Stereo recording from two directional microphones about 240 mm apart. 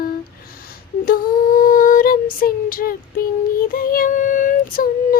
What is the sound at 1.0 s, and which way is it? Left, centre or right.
Female singing, left.